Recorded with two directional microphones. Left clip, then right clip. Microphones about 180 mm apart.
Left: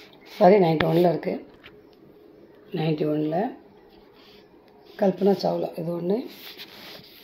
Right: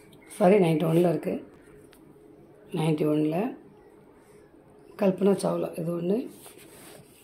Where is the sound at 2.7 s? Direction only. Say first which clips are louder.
Left 1 dB; 5° right (ahead or behind).